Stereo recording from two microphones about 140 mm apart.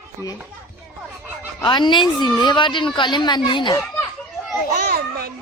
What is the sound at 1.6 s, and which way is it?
Speech, 35° left (ahead or behind).